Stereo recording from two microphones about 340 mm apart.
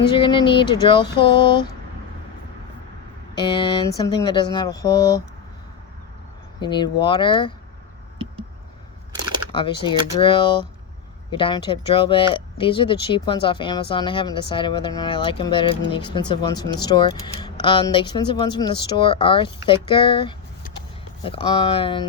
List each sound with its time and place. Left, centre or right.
0.2 s speech: centre
3.5 s speech: centre
6.6 s speech: centre
9.5 s speech: centre